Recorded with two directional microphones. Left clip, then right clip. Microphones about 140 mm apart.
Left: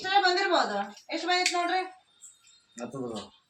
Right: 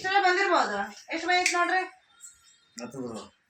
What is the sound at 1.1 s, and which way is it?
Speech, 20° left (ahead or behind).